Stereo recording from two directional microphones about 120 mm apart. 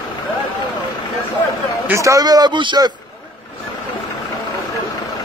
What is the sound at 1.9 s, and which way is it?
A man's voice, 25° right (ahead or behind).